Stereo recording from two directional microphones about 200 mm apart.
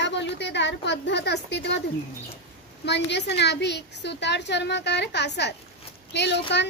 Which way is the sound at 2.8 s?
60° left (ahead or behind).